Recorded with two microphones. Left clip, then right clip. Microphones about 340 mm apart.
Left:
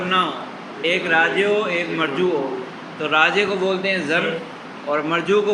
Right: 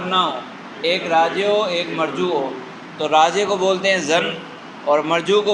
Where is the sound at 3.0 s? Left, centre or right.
Centre.